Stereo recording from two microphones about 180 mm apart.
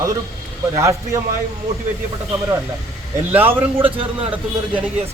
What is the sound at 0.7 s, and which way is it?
Speech, 15° right (ahead or behind).